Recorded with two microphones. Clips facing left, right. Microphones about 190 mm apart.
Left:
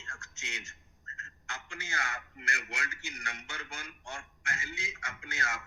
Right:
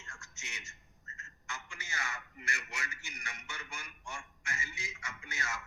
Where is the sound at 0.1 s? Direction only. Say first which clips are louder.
Left 6 dB; 70° left (ahead or behind).